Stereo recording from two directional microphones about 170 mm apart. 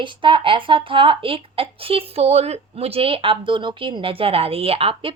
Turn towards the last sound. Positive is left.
turn(degrees=-35)  # may be behind; listen again after turning